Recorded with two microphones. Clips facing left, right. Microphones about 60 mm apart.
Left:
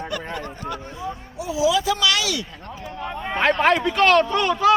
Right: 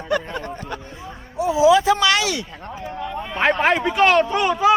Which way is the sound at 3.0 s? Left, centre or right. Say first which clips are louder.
Left 2 dB; left.